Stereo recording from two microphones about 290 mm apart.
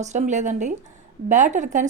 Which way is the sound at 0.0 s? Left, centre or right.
Right.